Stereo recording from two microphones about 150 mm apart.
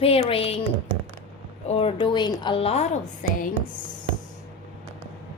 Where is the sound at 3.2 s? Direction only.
65° left (ahead or behind).